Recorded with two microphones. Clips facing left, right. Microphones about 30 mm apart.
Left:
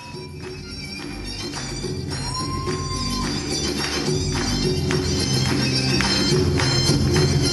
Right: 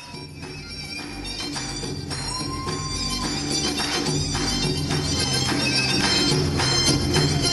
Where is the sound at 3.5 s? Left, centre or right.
Right.